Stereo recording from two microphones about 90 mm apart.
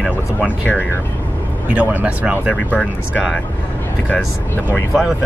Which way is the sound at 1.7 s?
20° right (ahead or behind).